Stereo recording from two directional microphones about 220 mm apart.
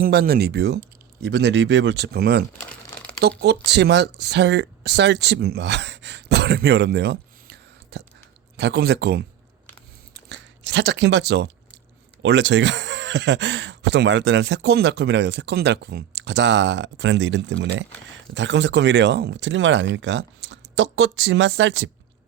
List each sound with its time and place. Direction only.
0.0 s speech: 45° right (ahead or behind)
10.2 s crunch: 50° right (ahead or behind)
12.2 s speech: 55° right (ahead or behind)